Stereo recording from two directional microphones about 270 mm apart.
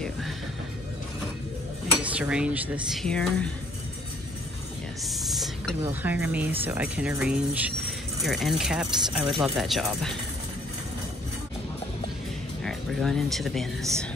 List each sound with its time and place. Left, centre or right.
2.0 s cutlery: centre
5.0 s a sound: centre
6.0 s cutlery: centre
9.1 s speech: right
9.4 s cutlery: centre
12.6 s speech: centre